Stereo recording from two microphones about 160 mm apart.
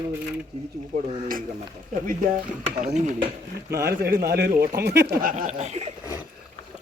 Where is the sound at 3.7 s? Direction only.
15° right (ahead or behind).